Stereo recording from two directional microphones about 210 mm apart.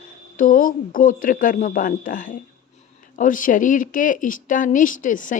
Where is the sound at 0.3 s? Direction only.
40° left (ahead or behind).